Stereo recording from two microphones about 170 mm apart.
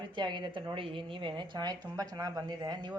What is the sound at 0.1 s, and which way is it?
A woman's voice, 25° right (ahead or behind).